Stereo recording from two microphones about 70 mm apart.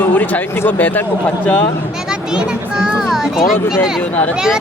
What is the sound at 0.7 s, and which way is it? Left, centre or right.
Speech, left.